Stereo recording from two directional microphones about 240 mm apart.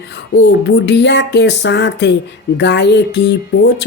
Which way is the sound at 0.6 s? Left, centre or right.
Left.